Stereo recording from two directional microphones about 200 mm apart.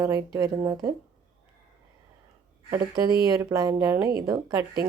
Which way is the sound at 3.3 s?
15° right (ahead or behind).